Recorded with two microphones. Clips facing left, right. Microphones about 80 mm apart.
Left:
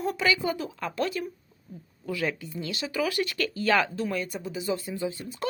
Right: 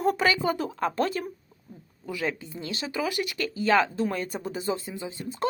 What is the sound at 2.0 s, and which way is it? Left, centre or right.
Speech, right.